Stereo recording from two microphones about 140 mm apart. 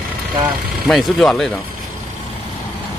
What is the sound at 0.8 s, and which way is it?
Speech, centre (ahead or behind).